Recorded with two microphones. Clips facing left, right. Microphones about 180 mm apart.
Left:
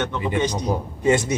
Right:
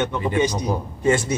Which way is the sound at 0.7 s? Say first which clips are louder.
Left 1 dB; 15° left (ahead or behind).